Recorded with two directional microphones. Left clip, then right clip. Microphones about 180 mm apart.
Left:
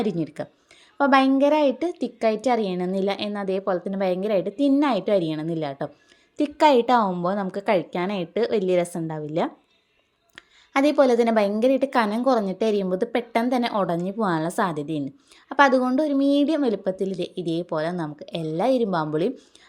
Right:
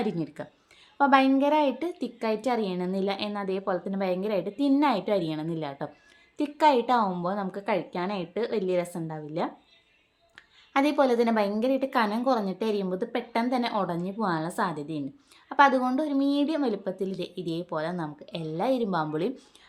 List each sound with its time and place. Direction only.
0.0 s a woman's voice: 25° left (ahead or behind)